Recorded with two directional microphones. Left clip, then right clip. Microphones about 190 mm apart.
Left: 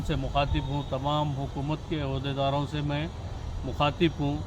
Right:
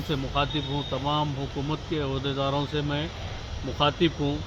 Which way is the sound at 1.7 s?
25° left (ahead or behind).